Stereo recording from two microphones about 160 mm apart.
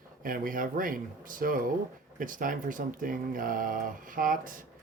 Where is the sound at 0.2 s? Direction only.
60° right (ahead or behind).